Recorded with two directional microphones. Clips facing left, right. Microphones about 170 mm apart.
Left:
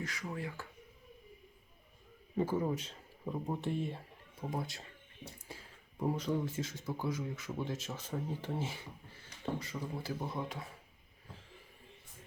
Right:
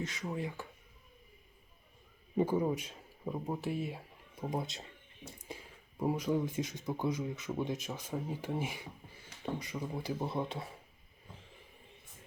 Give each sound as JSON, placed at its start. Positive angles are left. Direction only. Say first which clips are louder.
{"t": 0.0, "sound": "speech", "louder": "right 3 dB", "side_deg": -20}
{"t": 2.3, "sound": "speech", "louder": "right 3 dB", "side_deg": -15}